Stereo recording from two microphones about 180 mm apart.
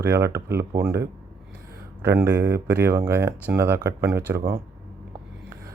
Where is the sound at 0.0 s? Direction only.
15° right (ahead or behind).